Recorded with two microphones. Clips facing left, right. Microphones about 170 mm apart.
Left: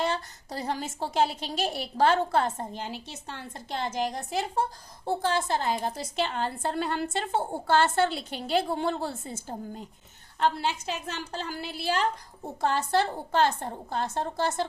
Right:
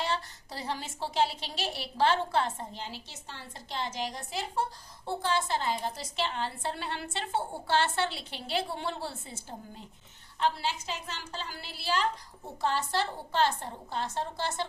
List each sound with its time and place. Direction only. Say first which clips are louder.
0.0 s a woman's voice: left 4 dB; 45° left (ahead or behind)